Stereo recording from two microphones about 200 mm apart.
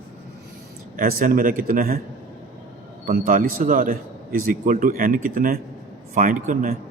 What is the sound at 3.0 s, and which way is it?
A man's voice, 40° right (ahead or behind).